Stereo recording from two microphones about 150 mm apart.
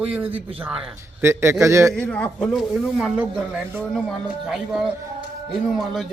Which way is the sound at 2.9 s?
10° right (ahead or behind).